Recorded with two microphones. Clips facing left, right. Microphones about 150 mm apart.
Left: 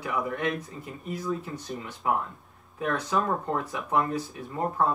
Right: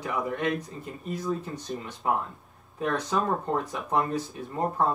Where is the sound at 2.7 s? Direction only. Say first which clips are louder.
Even; 35° right (ahead or behind).